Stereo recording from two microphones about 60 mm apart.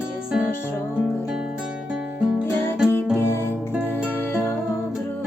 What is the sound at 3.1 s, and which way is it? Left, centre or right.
Music, left.